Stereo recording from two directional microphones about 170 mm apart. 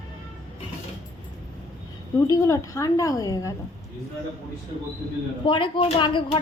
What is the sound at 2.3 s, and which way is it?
A woman's voice, 20° left (ahead or behind).